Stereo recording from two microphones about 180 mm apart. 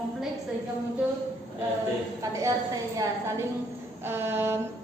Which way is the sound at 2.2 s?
15° right (ahead or behind).